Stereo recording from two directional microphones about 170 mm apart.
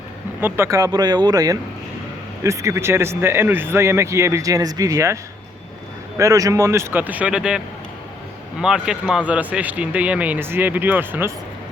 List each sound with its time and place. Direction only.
0.4 s speech: 15° right (ahead or behind)
6.1 s speech: 20° right (ahead or behind)
8.6 s speech: 5° right (ahead or behind)